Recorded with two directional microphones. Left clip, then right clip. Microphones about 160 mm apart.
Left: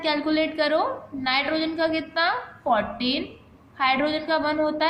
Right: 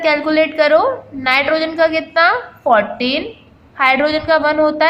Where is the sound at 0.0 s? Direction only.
30° right (ahead or behind).